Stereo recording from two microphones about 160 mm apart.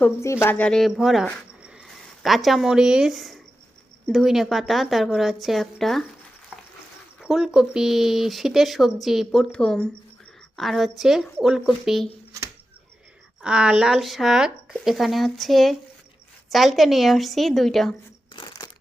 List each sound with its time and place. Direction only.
0.0 s speech: 15° left (ahead or behind); by 6.1 s centre (ahead or behind)
7.2 s speech: centre (ahead or behind)
13.4 s speech: 5° right (ahead or behind)
18.3 s crumpling: 25° left (ahead or behind)